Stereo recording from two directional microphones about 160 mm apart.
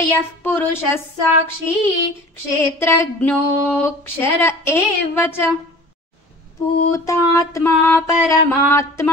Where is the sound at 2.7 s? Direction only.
15° left (ahead or behind).